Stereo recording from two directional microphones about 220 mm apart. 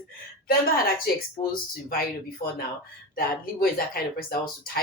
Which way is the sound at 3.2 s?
45° left (ahead or behind).